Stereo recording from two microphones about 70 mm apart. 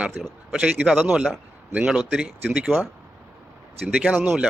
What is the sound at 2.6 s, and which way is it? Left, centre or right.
Speech, right.